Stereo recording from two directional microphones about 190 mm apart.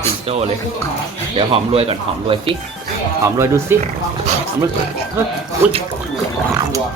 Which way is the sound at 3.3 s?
15° right (ahead or behind).